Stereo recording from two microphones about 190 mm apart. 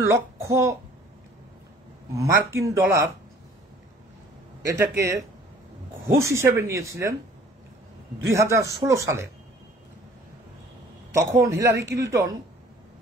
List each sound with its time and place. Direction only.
0.0 s speech: 15° right (ahead or behind)
2.1 s speech: 15° right (ahead or behind)
4.6 s speech: 15° right (ahead or behind)
8.3 s speech: 15° right (ahead or behind)
11.1 s speech: 15° right (ahead or behind)